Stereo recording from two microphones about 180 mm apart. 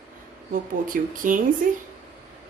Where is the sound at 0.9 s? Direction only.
50° right (ahead or behind).